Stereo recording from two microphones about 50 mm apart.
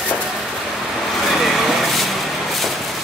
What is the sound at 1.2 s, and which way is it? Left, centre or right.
Vehicle, centre.